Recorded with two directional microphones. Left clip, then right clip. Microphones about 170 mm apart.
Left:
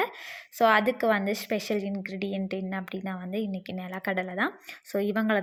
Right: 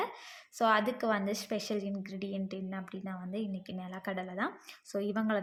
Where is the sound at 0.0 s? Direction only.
25° left (ahead or behind).